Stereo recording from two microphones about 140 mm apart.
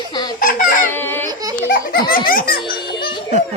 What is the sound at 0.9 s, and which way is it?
Baby cry, 15° left (ahead or behind).